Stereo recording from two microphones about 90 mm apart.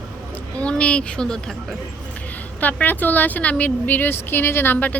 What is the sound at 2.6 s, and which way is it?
A woman's voice, 20° left (ahead or behind).